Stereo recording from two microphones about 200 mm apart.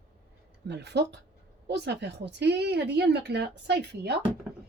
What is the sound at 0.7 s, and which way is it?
Speech, 60° right (ahead or behind).